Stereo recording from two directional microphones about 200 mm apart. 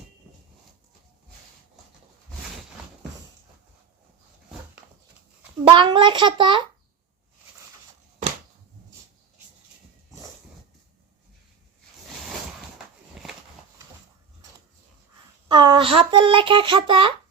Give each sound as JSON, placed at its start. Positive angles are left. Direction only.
{"t": 5.6, "sound": "a child's voice", "side_deg": -25}
{"t": 15.4, "sound": "speech", "side_deg": -20}